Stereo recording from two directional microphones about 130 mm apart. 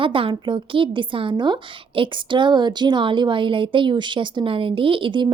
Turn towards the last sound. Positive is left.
turn(degrees=-40)  # may be behind; listen again after turning